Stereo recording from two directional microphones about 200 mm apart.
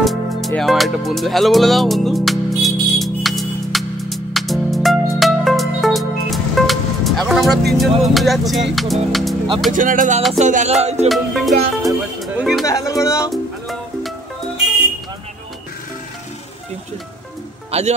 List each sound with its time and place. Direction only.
0.0 s music: centre (ahead or behind)
8.0 s speech: centre (ahead or behind)
9.7 s music: 40° right (ahead or behind)
11.1 s speech: centre (ahead or behind)
12.6 s speech: 15° left (ahead or behind)
13.3 s music: centre (ahead or behind)
17.6 s music: 30° right (ahead or behind)